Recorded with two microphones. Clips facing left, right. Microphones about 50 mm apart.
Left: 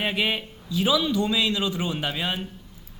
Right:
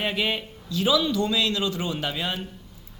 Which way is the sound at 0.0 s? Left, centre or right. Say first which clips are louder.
Left 1 dB; centre.